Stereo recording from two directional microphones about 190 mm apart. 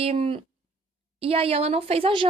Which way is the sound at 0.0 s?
30° right (ahead or behind).